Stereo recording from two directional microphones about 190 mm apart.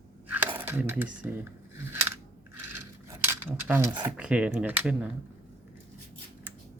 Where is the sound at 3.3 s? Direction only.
10° right (ahead or behind).